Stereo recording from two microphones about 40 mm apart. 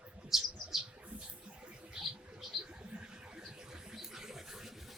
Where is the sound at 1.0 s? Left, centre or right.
Right.